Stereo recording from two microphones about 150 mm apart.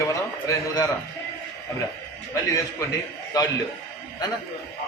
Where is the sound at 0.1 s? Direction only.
20° left (ahead or behind).